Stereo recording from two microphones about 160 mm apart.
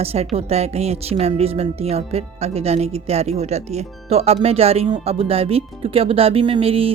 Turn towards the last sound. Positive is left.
turn(degrees=-35)  # may be behind; listen again after turning